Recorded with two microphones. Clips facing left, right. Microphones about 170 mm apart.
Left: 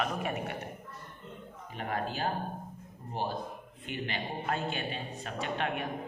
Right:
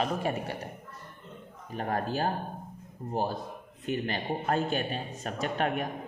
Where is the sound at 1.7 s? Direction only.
40° right (ahead or behind).